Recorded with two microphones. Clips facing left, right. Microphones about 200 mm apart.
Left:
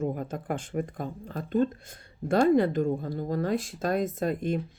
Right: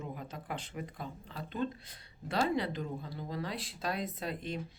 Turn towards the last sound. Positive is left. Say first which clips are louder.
# left 10 dB
turn(degrees=50)  # may be behind; listen again after turning